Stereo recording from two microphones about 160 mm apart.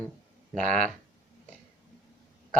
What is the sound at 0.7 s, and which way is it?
Speech, 5° left (ahead or behind).